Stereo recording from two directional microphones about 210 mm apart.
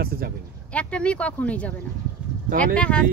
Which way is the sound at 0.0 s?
45° right (ahead or behind).